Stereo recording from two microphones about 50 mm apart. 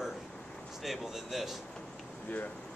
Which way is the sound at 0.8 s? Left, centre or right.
Centre.